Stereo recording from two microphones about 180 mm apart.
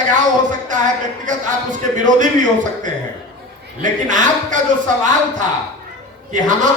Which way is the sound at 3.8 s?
45° right (ahead or behind).